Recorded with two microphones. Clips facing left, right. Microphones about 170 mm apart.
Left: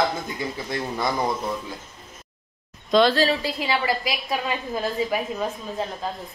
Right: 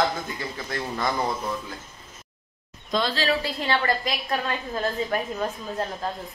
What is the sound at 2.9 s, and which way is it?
Speech, 80° left.